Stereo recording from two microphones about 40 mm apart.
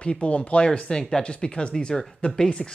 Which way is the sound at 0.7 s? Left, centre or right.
Centre.